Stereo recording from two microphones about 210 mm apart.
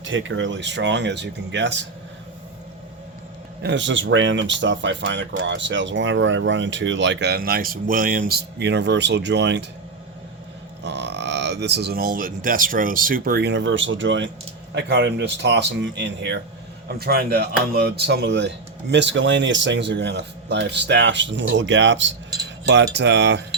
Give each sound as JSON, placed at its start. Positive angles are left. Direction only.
{"t": 0.0, "sound": "speech", "side_deg": -65}
{"t": 3.6, "sound": "speech", "side_deg": -55}
{"t": 10.8, "sound": "speech", "side_deg": -55}
{"t": 22.6, "sound": "cutlery", "side_deg": -55}
{"t": 23.0, "sound": "speech", "side_deg": -55}